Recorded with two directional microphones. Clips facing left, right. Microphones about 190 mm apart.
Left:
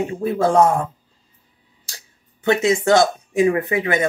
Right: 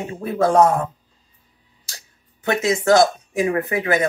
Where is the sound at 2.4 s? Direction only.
25° left (ahead or behind).